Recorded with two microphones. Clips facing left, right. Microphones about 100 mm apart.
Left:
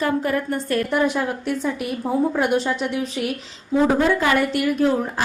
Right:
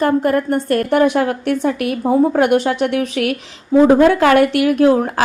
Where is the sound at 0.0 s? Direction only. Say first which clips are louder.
Right 6 dB; 50° right (ahead or behind).